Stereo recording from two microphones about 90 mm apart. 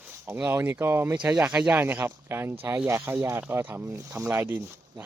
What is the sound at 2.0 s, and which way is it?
Speech, 25° right (ahead or behind).